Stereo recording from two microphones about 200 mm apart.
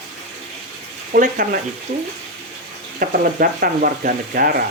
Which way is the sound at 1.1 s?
45° right (ahead or behind).